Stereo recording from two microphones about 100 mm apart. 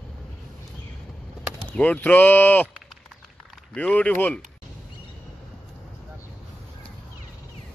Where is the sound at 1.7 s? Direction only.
15° left (ahead or behind).